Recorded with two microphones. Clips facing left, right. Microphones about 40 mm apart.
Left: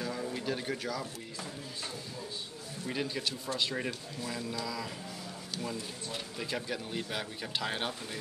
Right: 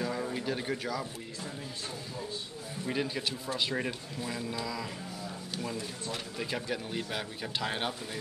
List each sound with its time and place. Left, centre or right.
0.0 s a sound: centre
0.4 s speech: centre
2.9 s speech: centre
6.3 s speech: centre